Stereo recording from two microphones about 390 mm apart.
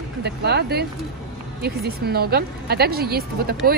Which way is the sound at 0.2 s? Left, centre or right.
Right.